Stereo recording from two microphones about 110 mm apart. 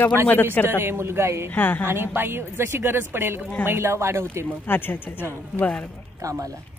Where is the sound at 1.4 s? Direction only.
15° left (ahead or behind).